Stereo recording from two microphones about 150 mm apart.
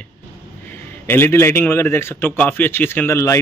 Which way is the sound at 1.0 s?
15° left (ahead or behind).